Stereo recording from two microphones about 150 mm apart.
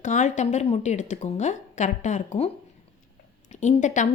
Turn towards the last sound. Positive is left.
turn(degrees=55)  # may be behind; listen again after turning